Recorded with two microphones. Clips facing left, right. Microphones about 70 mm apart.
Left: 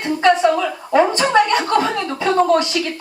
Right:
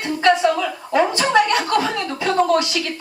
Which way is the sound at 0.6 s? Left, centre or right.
Centre.